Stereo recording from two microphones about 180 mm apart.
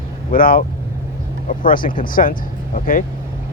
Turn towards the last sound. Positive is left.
turn(degrees=50)  # may be behind; listen again after turning